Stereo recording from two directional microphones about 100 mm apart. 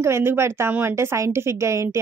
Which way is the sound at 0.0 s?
25° right (ahead or behind).